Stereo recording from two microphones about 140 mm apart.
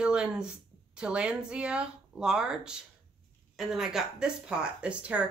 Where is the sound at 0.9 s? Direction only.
5° right (ahead or behind).